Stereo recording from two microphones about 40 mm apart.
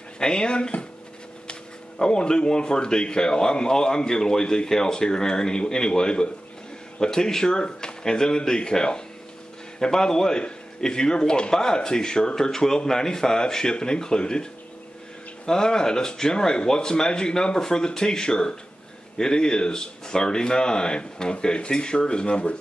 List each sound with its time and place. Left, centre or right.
0.2 s a man's voice: left